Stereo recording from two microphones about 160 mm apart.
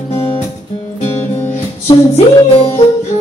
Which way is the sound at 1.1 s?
15° left (ahead or behind).